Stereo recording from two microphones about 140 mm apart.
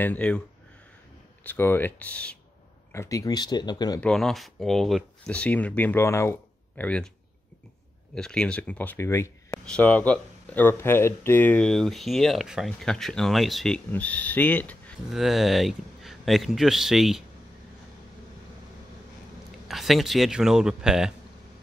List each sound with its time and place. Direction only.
0.0 s speech: 10° left (ahead or behind)
1.4 s speech: 15° left (ahead or behind)
2.9 s speech: 20° left (ahead or behind)
4.0 s speech: 5° left (ahead or behind)
8.1 s speech: 5° left (ahead or behind)
9.7 s speech: 10° left (ahead or behind)
13.9 s speech: 10° left (ahead or behind)
15.0 s speech: centre (ahead or behind)
19.7 s speech: centre (ahead or behind)